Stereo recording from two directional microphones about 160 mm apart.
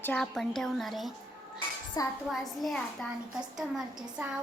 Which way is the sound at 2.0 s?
25° left (ahead or behind).